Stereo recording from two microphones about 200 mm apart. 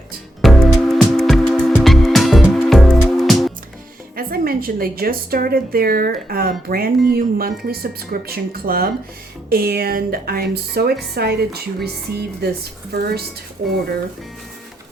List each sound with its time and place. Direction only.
0.4 s music: centre (ahead or behind)
4.1 s a woman's voice: 50° right (ahead or behind)